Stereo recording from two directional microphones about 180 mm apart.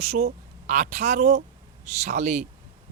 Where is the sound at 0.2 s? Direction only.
50° right (ahead or behind).